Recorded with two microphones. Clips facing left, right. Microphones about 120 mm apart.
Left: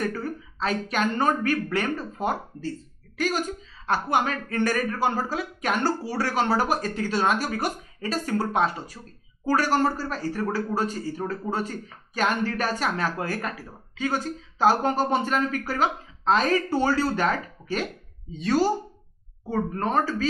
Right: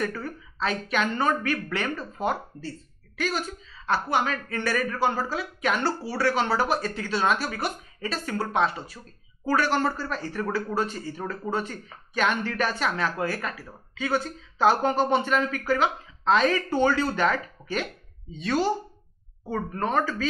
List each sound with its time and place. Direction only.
0.2 s a woman's voice: 40° left (ahead or behind)
3.2 s speech: 45° left (ahead or behind)
19.8 s speech: 35° left (ahead or behind)